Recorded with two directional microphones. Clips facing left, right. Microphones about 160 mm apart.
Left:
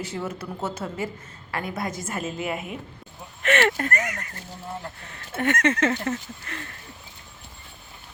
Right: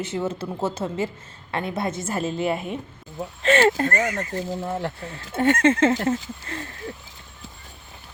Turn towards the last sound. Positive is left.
turn(degrees=-30)  # may be behind; listen again after turning